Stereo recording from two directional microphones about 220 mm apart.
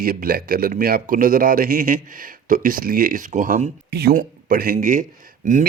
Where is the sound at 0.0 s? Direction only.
40° right (ahead or behind).